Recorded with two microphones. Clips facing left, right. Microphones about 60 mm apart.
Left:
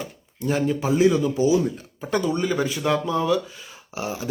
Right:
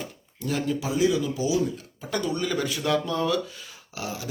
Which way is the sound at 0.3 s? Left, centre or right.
Left.